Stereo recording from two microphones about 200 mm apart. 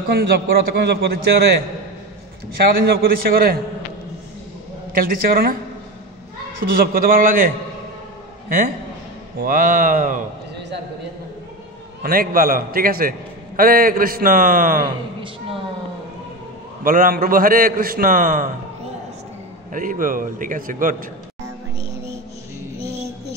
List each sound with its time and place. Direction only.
0.1 s a man's voice: 50° right (ahead or behind)
2.6 s a man's voice: 50° right (ahead or behind)
4.9 s a man's voice: 50° right (ahead or behind)
6.8 s a man's voice: 45° right (ahead or behind)
12.0 s a man's voice: 45° right (ahead or behind)
16.8 s a man's voice: 45° right (ahead or behind)
19.7 s a man's voice: 40° right (ahead or behind)